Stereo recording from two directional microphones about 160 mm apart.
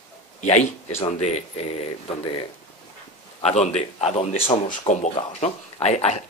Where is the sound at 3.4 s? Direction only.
40° left (ahead or behind).